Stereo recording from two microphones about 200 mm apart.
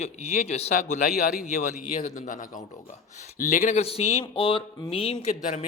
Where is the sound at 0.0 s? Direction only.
35° left (ahead or behind).